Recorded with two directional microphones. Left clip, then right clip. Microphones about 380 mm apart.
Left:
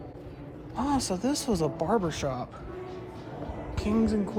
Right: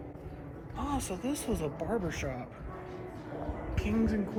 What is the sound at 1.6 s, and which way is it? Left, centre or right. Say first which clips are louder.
Music: left 9 dB; centre.